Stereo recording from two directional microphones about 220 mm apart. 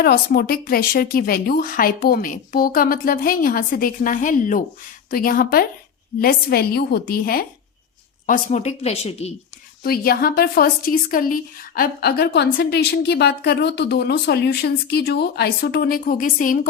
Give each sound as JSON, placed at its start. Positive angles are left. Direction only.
{"t": 0.0, "sound": "a woman's voice", "side_deg": 45}
{"t": 9.8, "sound": "a woman's voice", "side_deg": 45}